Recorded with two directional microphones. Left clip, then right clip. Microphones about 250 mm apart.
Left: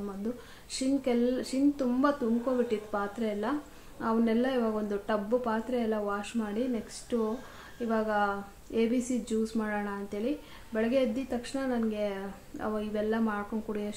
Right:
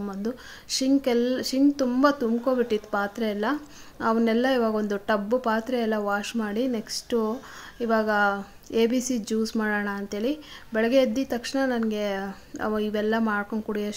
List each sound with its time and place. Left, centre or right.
0.2 s speech: right